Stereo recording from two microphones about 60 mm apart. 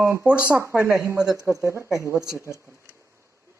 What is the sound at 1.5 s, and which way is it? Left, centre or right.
Speech, right.